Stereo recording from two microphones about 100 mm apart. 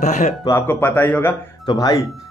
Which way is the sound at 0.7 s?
20° left (ahead or behind).